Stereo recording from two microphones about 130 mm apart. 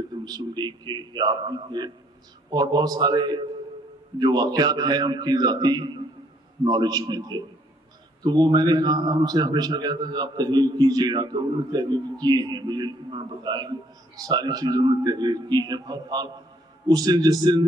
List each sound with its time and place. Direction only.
0.1 s a man's voice: 30° right (ahead or behind)